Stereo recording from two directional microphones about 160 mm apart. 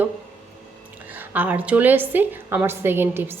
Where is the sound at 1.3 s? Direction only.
10° right (ahead or behind).